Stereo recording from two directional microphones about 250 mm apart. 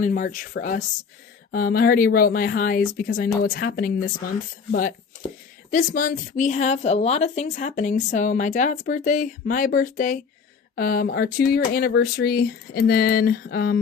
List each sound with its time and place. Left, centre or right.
0.0 s a woman's voice: left